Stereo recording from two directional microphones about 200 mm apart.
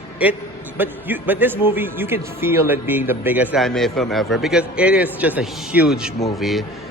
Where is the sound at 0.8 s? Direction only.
10° right (ahead or behind).